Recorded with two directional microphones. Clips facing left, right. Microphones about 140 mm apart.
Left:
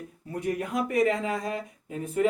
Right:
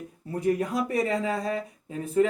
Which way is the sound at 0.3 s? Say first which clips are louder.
Right 3 dB; 35° right (ahead or behind).